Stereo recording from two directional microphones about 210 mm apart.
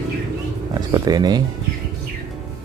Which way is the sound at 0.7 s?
20° right (ahead or behind).